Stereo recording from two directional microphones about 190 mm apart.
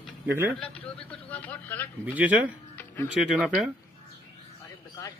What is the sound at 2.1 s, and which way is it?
A man's voice, 10° right (ahead or behind).